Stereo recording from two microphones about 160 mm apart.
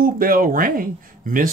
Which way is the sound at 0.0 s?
60° right (ahead or behind).